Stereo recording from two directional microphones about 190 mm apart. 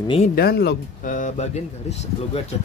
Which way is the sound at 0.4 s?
55° left (ahead or behind).